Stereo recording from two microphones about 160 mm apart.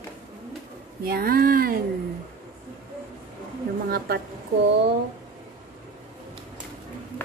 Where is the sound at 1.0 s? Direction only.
70° right (ahead or behind).